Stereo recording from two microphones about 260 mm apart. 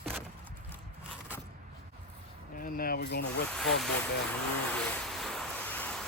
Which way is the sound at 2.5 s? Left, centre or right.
Left.